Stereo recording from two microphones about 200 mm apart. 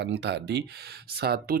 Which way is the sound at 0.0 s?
60° right (ahead or behind).